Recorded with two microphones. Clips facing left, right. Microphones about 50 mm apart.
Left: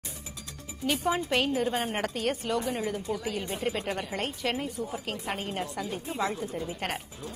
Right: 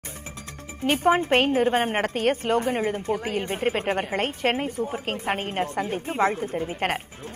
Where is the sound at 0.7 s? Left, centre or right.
Right.